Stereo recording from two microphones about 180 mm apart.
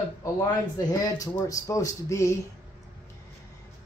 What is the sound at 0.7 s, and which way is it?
Speech, 20° left (ahead or behind).